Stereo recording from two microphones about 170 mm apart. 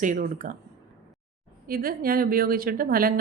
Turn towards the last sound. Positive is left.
turn(degrees=-60)  # may be behind; listen again after turning